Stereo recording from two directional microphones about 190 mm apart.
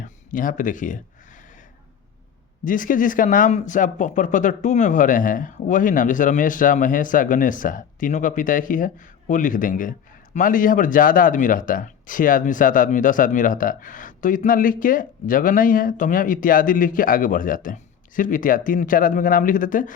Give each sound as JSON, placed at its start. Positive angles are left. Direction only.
{"t": 0.0, "sound": "speech", "side_deg": 45}
{"t": 2.6, "sound": "speech", "side_deg": 45}